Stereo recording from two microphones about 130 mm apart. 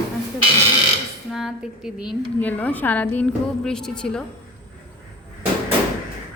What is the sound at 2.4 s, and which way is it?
A woman's voice, 10° left (ahead or behind).